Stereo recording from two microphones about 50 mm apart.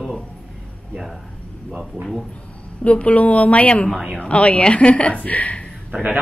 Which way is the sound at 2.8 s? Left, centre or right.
Left.